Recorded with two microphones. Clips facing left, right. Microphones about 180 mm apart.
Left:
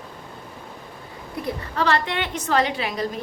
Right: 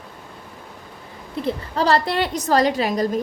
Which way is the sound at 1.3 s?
30° right (ahead or behind).